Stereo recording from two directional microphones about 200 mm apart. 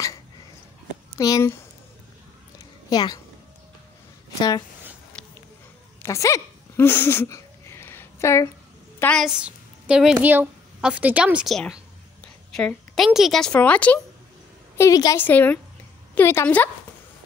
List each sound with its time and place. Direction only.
1.1 s a woman's voice: 15° left (ahead or behind)
2.9 s a woman's voice: 20° left (ahead or behind)
4.4 s speech: 20° left (ahead or behind)
5.1 s a sound: 5° left (ahead or behind)
9.0 s a woman's voice: centre (ahead or behind)
14.8 s a woman's voice: 15° left (ahead or behind)